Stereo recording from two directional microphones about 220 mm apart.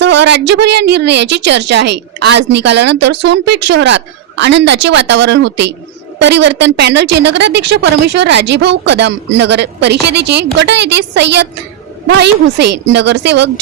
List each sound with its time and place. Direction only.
0.0 s a woman's voice: 50° right (ahead or behind)